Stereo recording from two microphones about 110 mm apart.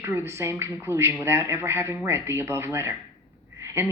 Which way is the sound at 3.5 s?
25° right (ahead or behind).